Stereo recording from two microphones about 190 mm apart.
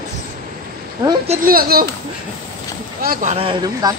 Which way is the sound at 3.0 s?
45° right (ahead or behind).